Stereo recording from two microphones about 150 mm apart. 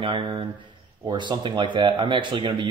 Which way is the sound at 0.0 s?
35° right (ahead or behind).